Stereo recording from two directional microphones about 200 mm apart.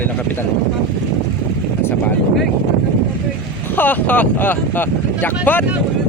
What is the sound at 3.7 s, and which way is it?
Speech, 10° left (ahead or behind).